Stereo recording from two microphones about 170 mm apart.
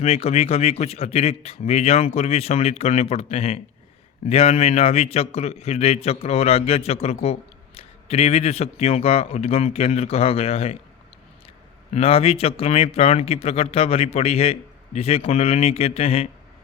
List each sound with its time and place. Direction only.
0.0 s speech: 35° left (ahead or behind)
11.9 s speech: 35° left (ahead or behind)